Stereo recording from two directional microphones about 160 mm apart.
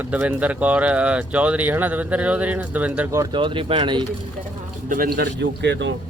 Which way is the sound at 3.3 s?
30° right (ahead or behind).